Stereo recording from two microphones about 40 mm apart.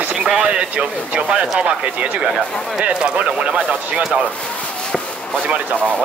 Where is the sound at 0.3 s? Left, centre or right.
Right.